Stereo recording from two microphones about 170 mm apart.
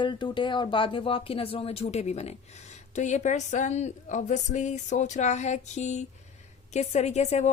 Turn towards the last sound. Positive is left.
turn(degrees=40)  # may be behind; listen again after turning